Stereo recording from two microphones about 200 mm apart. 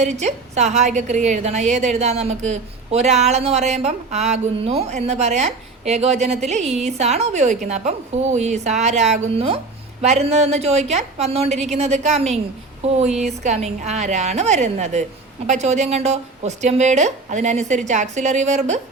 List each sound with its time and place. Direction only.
0.0 s a woman's voice: 35° right (ahead or behind)